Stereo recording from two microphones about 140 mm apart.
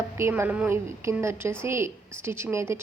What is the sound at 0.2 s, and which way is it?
A woman's voice, 15° right (ahead or behind).